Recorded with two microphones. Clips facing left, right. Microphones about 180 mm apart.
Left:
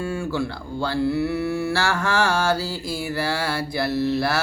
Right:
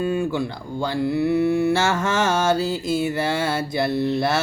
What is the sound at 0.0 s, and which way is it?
Mantra, 20° right (ahead or behind).